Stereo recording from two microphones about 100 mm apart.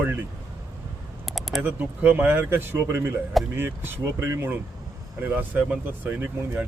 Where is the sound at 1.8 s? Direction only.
15° right (ahead or behind).